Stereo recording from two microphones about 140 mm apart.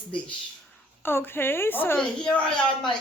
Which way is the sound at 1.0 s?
15° left (ahead or behind).